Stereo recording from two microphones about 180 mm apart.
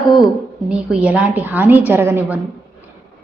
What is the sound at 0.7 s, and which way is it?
A woman's voice, 5° right (ahead or behind).